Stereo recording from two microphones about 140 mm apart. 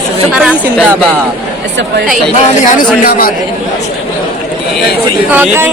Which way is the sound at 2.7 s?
90° left.